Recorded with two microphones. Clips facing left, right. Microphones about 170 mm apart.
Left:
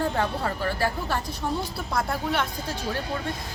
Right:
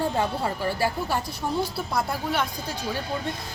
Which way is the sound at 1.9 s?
Centre (ahead or behind).